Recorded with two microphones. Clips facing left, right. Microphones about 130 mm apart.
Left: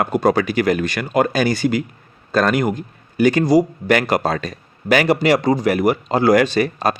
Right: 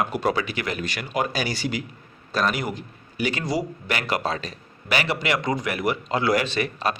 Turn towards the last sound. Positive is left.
turn(degrees=40)  # may be behind; listen again after turning